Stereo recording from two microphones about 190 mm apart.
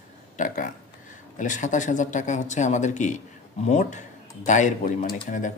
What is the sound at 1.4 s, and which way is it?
Speech, 40° left (ahead or behind).